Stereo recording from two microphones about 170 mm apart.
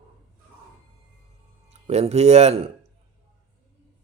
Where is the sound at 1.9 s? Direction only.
40° right (ahead or behind).